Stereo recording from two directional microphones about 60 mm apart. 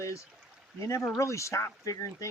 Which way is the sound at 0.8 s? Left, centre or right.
Left.